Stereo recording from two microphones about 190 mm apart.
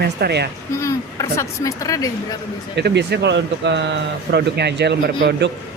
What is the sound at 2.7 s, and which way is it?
Speech, 65° right (ahead or behind).